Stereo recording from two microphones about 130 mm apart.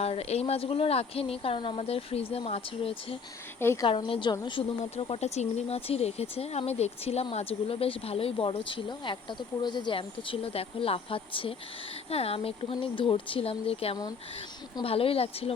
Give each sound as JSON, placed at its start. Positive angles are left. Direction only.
{"t": 0.0, "sound": "speech", "side_deg": 50}
{"t": 3.6, "sound": "a woman's voice", "side_deg": 20}
{"t": 3.8, "sound": "a woman's voice", "side_deg": 40}